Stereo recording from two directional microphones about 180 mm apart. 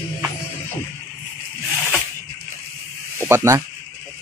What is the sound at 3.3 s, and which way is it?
Speech, 15° right (ahead or behind).